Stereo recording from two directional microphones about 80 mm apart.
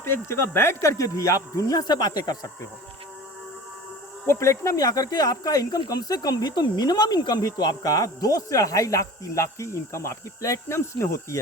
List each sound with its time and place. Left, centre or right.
0.0 s speech: left
4.3 s speech: left